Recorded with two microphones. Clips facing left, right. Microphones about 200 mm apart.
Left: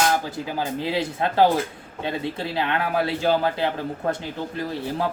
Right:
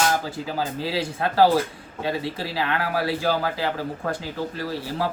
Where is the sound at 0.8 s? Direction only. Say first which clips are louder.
Left 2 dB; 20° left (ahead or behind).